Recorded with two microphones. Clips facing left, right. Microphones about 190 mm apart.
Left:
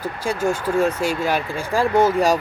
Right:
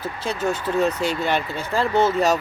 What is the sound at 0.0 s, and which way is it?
Speech, 10° left (ahead or behind).